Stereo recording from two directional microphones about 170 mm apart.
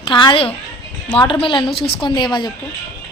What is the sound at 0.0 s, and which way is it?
A woman's voice, 30° left (ahead or behind).